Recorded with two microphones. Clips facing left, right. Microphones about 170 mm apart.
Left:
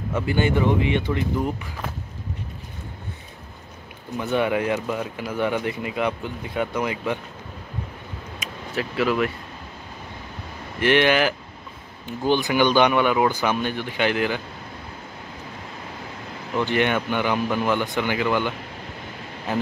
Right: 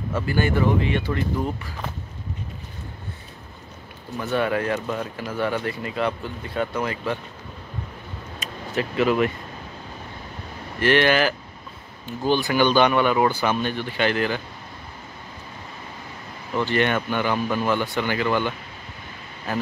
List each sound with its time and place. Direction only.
0.1 s speech: 20° left (ahead or behind)
4.2 s speech: 15° left (ahead or behind)
8.7 s speech: centre (ahead or behind)
10.8 s speech: 15° left (ahead or behind)
16.5 s speech: 15° left (ahead or behind)